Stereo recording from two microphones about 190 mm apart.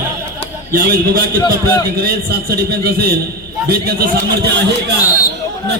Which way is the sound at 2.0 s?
55° right (ahead or behind).